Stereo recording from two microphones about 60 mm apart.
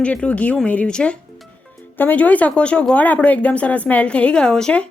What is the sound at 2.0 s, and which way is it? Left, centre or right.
Speech, left.